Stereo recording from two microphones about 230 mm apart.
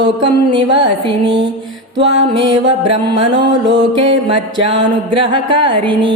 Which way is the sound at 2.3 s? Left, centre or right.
Right.